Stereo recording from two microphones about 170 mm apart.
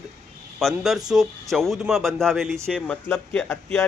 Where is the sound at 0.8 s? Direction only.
Centre (ahead or behind).